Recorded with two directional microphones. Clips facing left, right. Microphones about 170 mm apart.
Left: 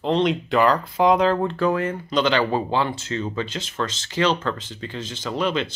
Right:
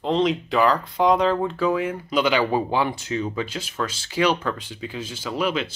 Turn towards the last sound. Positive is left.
turn(degrees=-5)  # may be behind; listen again after turning